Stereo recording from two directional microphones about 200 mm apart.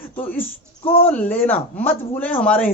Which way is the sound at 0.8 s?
25° left (ahead or behind).